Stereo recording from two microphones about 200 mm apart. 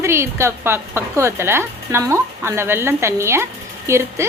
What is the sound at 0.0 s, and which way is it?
A woman's voice, 15° right (ahead or behind).